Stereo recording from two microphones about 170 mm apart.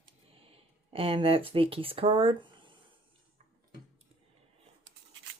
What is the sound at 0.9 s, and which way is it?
Speech, 35° right (ahead or behind).